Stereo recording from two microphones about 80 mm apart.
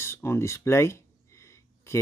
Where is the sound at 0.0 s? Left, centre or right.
Left.